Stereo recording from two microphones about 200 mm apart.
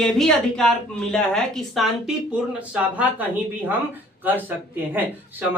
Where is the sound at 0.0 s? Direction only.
Centre (ahead or behind).